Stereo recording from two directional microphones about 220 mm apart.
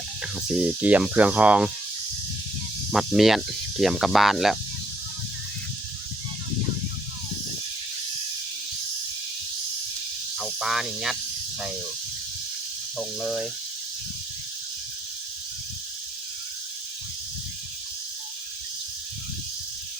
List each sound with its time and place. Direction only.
0.5 s speech: 5° right (ahead or behind)
2.9 s speech: centre (ahead or behind)
10.3 s speech: centre (ahead or behind)
13.0 s speech: centre (ahead or behind)